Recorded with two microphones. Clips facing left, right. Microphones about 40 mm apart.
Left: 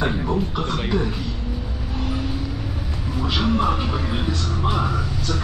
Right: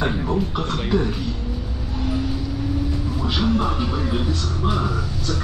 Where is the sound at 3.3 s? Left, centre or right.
Centre.